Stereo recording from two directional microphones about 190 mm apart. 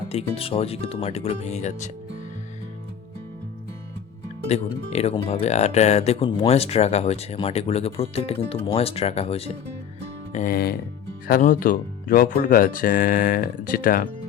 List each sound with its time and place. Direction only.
0.1 s speech: 30° left (ahead or behind)
4.4 s speech: 35° left (ahead or behind)
10.3 s speech: 45° left (ahead or behind)